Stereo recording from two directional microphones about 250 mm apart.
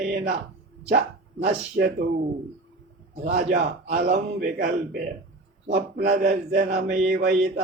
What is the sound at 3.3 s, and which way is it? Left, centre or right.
Speech, right.